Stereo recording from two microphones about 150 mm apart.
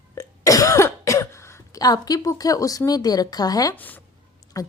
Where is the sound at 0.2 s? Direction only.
20° left (ahead or behind).